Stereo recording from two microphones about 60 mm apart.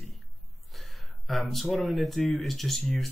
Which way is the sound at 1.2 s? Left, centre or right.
Centre.